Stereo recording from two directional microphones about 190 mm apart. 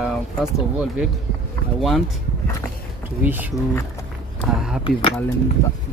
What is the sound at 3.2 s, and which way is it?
Speech, 10° right (ahead or behind).